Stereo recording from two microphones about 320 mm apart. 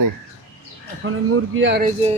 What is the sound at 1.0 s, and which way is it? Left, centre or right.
Speech, right.